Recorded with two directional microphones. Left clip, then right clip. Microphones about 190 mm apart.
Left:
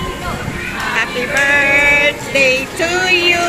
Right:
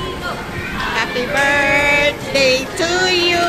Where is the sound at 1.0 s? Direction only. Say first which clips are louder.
Left 2 dB; 5° right (ahead or behind).